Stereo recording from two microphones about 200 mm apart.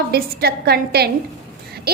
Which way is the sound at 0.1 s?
50° right (ahead or behind).